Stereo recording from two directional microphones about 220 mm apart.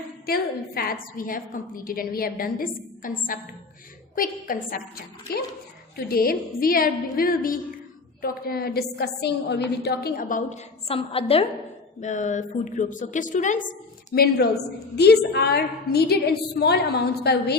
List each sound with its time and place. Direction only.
0.3 s a woman's voice: 45° left (ahead or behind)